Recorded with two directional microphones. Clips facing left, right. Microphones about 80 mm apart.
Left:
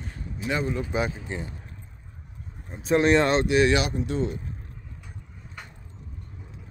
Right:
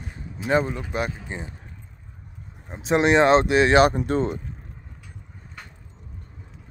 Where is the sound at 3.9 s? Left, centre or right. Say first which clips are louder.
Right 4 dB; right.